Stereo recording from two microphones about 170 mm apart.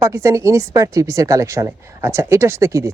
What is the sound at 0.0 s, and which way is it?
Speech, 15° right (ahead or behind).